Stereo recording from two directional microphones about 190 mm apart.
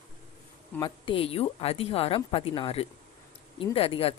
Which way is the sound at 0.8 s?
25° left (ahead or behind).